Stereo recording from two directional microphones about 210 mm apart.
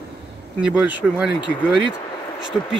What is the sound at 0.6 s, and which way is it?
Speech, 5° right (ahead or behind).